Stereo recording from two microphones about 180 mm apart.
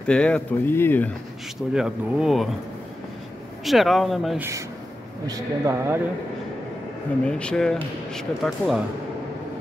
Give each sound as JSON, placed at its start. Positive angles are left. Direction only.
{"t": 0.0, "sound": "speech", "side_deg": 5}
{"t": 1.7, "sound": "speech", "side_deg": -5}
{"t": 3.6, "sound": "speech", "side_deg": 0}
{"t": 4.4, "sound": "speech", "side_deg": -15}
{"t": 7.2, "sound": "speech", "side_deg": 5}